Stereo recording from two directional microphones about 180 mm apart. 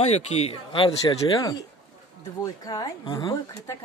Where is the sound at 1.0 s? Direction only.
20° left (ahead or behind).